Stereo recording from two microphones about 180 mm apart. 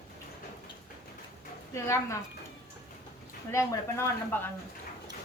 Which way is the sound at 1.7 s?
15° left (ahead or behind).